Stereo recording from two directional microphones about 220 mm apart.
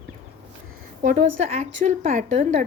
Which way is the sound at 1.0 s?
30° right (ahead or behind).